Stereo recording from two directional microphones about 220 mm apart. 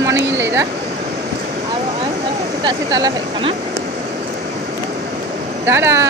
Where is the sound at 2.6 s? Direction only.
20° right (ahead or behind).